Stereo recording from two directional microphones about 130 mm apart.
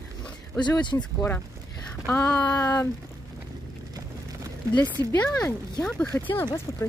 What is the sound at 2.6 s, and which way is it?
Speech, 25° left (ahead or behind).